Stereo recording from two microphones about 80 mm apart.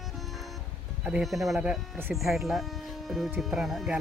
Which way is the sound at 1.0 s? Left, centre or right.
Centre.